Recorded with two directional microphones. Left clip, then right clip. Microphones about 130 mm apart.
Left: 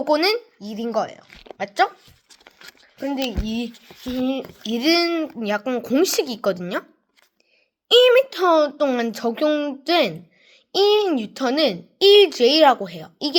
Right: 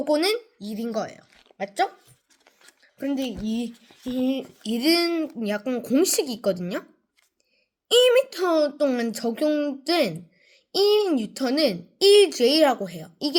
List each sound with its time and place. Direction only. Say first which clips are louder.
0.1 s a woman's voice: left 4 dB; 20° right (ahead or behind)
1.3 s a sound: left 14 dB; 40° left (ahead or behind)
1.5 s speech: left 5 dB; 15° right (ahead or behind)
3.4 s a woman's voice: left 2 dB; 20° right (ahead or behind)
7.9 s a woman's voice: left 4 dB; 20° right (ahead or behind)